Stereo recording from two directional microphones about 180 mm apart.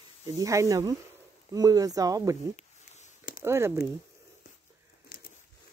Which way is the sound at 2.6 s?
40° left (ahead or behind).